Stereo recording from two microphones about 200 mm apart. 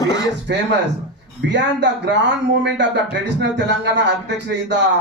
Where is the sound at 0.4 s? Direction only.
60° right (ahead or behind).